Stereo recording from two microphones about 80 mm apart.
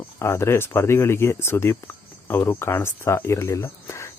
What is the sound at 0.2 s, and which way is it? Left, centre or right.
Speech, left.